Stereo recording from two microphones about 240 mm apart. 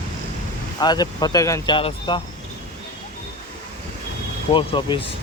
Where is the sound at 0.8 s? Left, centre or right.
Centre.